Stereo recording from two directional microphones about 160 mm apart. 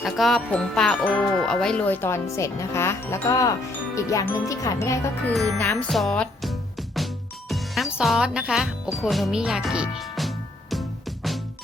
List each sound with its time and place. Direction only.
0.0 s music: centre (ahead or behind); by 3.5 s 20° left (ahead or behind)
3.9 s speech: 20° left (ahead or behind)
5.9 s music: 5° left (ahead or behind)